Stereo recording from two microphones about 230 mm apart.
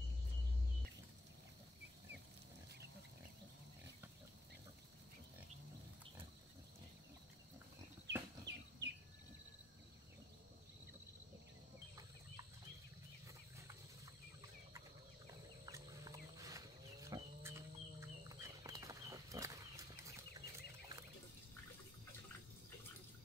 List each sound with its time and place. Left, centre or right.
8.1 s a sound: right
8.5 s chirp: right
15.6 s livestock: centre
20.1 s chicken: centre